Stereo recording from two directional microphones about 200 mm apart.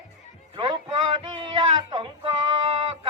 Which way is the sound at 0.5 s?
25° right (ahead or behind).